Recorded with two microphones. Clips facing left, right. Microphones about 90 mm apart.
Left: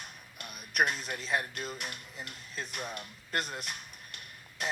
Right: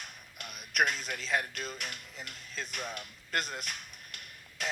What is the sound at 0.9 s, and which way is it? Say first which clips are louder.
Speech: even; 30° left (ahead or behind).